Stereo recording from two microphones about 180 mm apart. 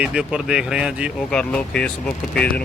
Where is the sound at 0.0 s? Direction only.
5° right (ahead or behind).